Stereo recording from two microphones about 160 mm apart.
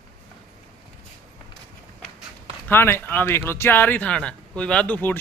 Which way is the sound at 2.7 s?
15° left (ahead or behind).